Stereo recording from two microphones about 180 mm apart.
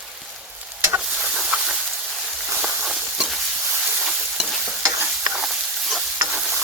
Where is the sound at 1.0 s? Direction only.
Centre (ahead or behind).